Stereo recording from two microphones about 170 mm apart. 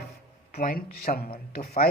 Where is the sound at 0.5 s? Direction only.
60° left (ahead or behind).